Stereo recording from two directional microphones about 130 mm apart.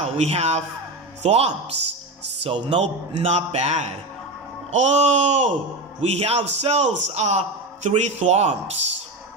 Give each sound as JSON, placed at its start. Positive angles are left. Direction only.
{"t": 0.0, "sound": "a man's voice", "side_deg": -55}
{"t": 2.4, "sound": "speech", "side_deg": -40}
{"t": 2.8, "sound": "speech", "side_deg": -50}